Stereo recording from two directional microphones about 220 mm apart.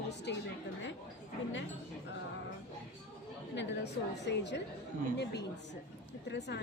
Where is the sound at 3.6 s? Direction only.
50° left (ahead or behind).